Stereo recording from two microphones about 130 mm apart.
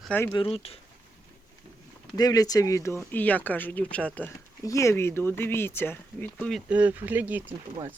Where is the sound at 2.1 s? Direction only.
30° left (ahead or behind); by 4.3 s 10° left (ahead or behind).